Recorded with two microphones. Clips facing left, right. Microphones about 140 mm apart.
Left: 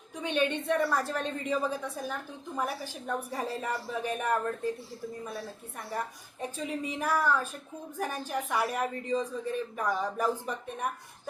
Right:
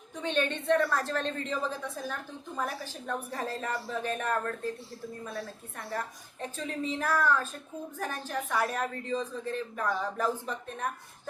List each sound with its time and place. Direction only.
0.2 s a woman's voice: 10° left (ahead or behind)